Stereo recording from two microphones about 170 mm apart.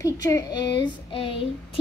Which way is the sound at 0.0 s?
20° left (ahead or behind).